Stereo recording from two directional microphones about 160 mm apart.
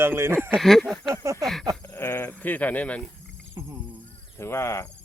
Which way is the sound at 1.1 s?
20° right (ahead or behind).